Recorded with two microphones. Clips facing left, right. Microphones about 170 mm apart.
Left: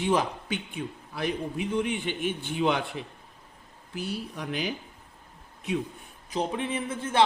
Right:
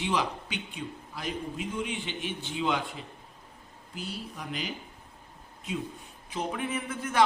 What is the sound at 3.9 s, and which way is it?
Speech, 65° left (ahead or behind).